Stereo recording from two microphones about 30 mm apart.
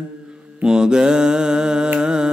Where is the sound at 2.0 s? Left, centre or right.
Right.